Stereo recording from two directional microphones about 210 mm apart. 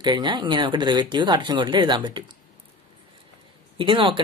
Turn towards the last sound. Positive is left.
turn(degrees=-25)  # may be behind; listen again after turning